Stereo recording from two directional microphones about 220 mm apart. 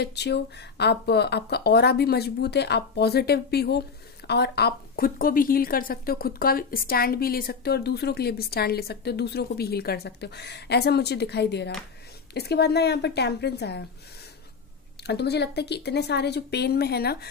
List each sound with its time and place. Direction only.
0.0 s speech: 50° left (ahead or behind)
15.0 s speech: 50° left (ahead or behind)